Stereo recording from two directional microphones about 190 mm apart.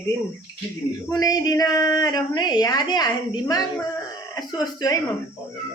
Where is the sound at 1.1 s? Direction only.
20° left (ahead or behind).